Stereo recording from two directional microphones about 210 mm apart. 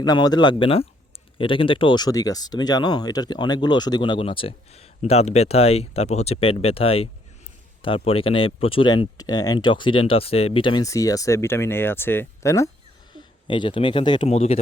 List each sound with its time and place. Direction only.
0.0 s speech: 20° left (ahead or behind)